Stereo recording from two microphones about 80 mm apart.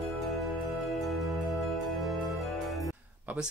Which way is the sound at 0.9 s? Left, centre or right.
Centre.